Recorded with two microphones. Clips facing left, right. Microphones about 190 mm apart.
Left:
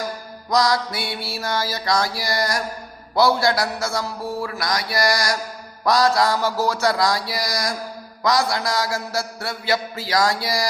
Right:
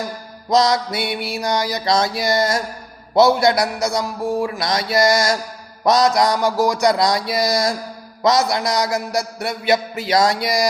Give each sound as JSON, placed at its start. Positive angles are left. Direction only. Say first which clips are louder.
{"t": 0.5, "sound": "a man's voice", "louder": "right 3 dB", "side_deg": -20}